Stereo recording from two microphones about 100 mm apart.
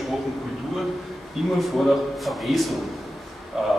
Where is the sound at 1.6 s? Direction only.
Centre (ahead or behind).